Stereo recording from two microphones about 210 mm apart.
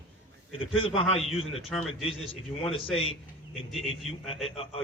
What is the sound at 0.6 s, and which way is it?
Speech, 25° left (ahead or behind).